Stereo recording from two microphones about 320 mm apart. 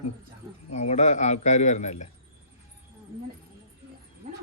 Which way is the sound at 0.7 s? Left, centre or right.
Left.